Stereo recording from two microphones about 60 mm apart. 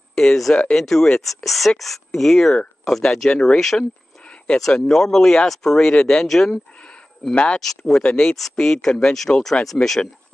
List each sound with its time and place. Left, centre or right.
0.1 s speech: centre
7.3 s speech: centre
7.6 s speech: centre